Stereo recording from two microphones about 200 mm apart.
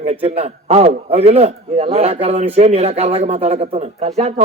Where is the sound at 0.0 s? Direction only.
30° right (ahead or behind).